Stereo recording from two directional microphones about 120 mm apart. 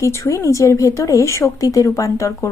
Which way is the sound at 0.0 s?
25° left (ahead or behind).